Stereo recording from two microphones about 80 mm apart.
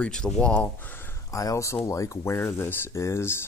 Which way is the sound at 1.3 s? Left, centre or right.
Left.